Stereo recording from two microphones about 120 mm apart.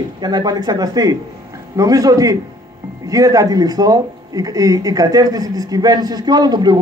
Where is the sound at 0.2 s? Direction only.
35° right (ahead or behind).